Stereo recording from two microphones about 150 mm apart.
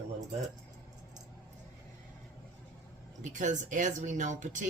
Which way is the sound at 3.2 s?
55° right (ahead or behind).